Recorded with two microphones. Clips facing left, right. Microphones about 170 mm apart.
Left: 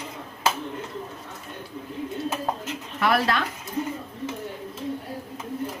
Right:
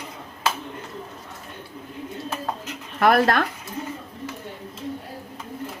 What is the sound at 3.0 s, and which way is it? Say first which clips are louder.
Speech: right 5 dB; 50° right (ahead or behind).